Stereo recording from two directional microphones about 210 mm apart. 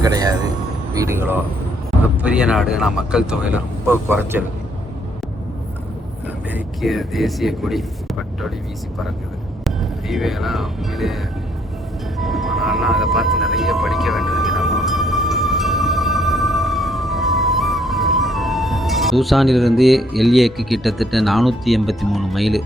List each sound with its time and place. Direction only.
0.0 s a sound: 15° right (ahead or behind)
0.9 s speech: 10° right (ahead or behind)
6.5 s speech: centre (ahead or behind)
9.6 s speech: centre (ahead or behind)
12.2 s music: centre (ahead or behind)